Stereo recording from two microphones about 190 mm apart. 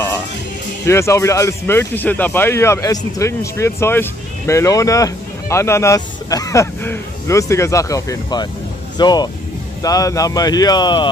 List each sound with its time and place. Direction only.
0.8 s speech: 15° left (ahead or behind)